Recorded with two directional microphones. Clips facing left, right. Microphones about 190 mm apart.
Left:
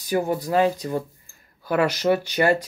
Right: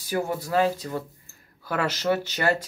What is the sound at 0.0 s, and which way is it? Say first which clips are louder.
Speech: left 4 dB; 15° left (ahead or behind).